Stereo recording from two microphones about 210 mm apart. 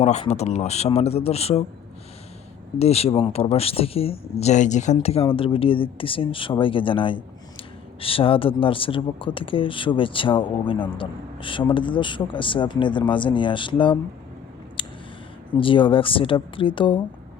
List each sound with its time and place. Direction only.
0.0 s speech: 30° left (ahead or behind)
2.7 s speech: 30° left (ahead or behind)
14.8 s a sound: 25° left (ahead or behind)
15.5 s speech: 25° left (ahead or behind)